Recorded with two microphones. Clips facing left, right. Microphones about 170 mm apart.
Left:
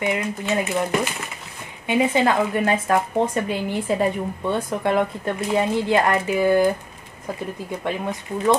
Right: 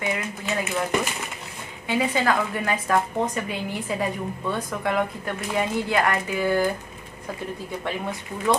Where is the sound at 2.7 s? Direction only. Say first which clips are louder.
Left 3 dB; 40° left (ahead or behind).